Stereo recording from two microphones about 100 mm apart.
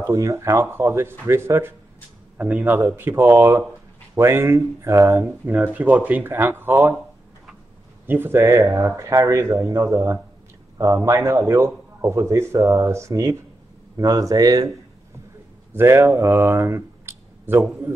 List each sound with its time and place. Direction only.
0.0 s a man's voice: 30° right (ahead or behind)
5.4 s a man's voice: 20° right (ahead or behind)
8.1 s a man's voice: 20° right (ahead or behind); by 14.7 s 40° right (ahead or behind)
15.7 s speech: 25° right (ahead or behind)